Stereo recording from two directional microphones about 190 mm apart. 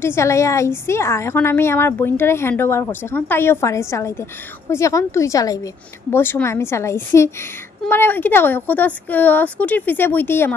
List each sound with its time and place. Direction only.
0.0 s speech: 15° left (ahead or behind)